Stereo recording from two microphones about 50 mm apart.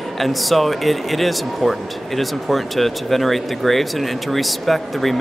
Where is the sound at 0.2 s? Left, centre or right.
Centre.